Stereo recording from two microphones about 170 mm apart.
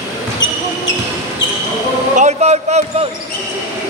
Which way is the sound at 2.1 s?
45° right (ahead or behind).